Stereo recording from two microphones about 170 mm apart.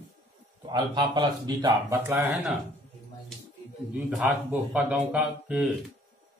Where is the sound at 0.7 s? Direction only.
25° right (ahead or behind).